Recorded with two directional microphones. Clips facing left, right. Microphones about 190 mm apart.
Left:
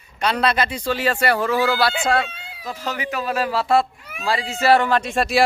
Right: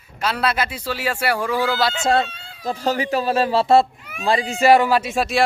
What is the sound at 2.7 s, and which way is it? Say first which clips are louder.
A man's voice: right 6 dB; 35° right (ahead or behind).